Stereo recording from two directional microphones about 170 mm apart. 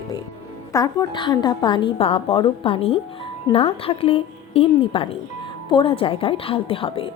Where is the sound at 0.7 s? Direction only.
20° left (ahead or behind).